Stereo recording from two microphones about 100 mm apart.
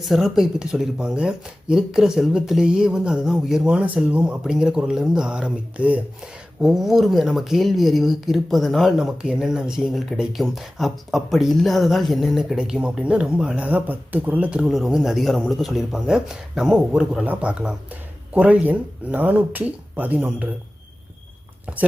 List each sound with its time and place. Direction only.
0.1 s speech: 5° right (ahead or behind)
21.7 s speech: 15° right (ahead or behind)